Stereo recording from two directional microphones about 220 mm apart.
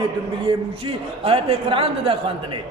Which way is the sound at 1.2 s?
25° right (ahead or behind).